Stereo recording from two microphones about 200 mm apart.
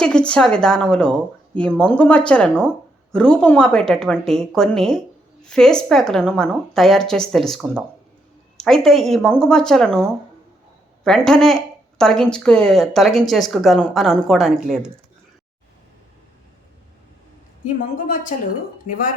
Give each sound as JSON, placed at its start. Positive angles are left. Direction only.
{"t": 0.0, "sound": "speech", "side_deg": 5}
{"t": 17.9, "sound": "a woman's voice", "side_deg": 40}